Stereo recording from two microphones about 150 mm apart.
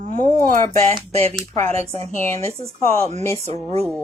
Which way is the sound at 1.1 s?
45° right (ahead or behind).